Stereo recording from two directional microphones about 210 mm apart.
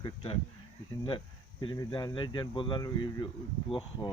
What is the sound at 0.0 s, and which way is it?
Speech, 25° left (ahead or behind).